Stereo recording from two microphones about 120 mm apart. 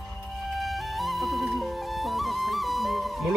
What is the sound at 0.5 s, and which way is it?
Music, centre (ahead or behind).